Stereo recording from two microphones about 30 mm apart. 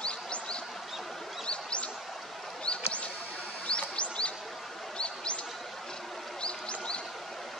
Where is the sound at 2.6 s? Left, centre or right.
Left.